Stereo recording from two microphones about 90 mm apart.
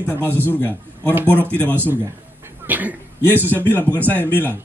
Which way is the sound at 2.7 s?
20° right (ahead or behind).